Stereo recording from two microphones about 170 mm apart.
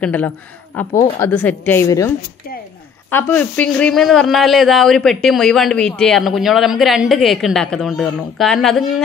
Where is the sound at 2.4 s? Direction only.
60° left (ahead or behind).